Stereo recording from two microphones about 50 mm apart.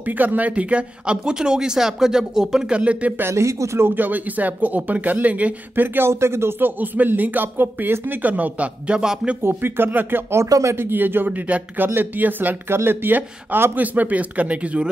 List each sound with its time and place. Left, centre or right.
0.2 s speech: right
0.5 s speech: right
2.8 s speech: right
3.2 s speech: right
3.8 s speech: right
5.9 s speech: right
6.6 s speech: right; by 9.3 s centre
9.4 s speech: right
10.3 s speech: right
10.8 s speech: right